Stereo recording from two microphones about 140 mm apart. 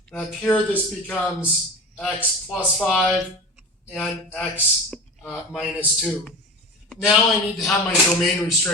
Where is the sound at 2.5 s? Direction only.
10° left (ahead or behind).